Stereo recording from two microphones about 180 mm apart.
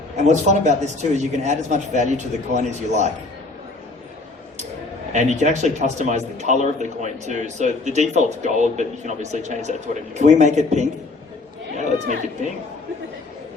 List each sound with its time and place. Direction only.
0.2 s a man's voice: 40° right (ahead or behind)
5.1 s a man's voice: 40° right (ahead or behind)